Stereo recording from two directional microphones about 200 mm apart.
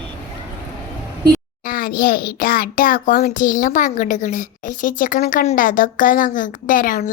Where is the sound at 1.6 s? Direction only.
45° left (ahead or behind).